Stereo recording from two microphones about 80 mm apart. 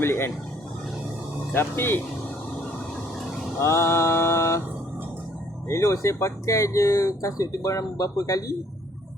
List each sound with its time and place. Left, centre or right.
0.0 s speech: left
1.5 s speech: left
3.6 s mantra: left
5.6 s speech: left